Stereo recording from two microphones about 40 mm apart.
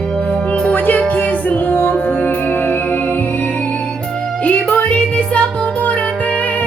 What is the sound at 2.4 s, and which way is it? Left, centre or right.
Music, left.